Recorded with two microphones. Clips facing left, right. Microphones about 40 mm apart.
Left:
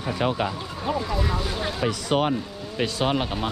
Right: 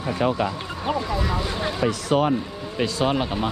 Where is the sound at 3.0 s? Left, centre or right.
Centre.